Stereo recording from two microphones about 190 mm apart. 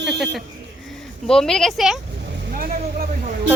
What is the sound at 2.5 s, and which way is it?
Vehicle, 50° right (ahead or behind).